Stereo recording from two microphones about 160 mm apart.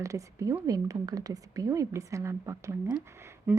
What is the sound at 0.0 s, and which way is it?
Speech, 20° right (ahead or behind).